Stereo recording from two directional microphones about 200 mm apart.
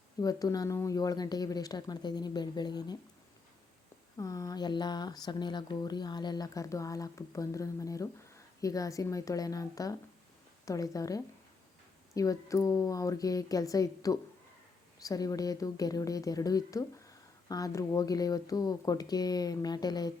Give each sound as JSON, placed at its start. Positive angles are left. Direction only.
{"t": 0.2, "sound": "speech", "side_deg": 20}
{"t": 4.2, "sound": "a woman's voice", "side_deg": 15}